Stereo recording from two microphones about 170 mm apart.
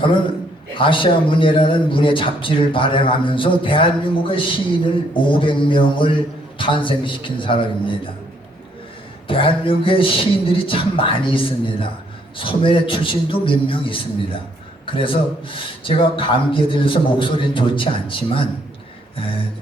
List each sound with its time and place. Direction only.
0.0 s speech: 30° left (ahead or behind)
9.2 s a man's voice: 30° left (ahead or behind)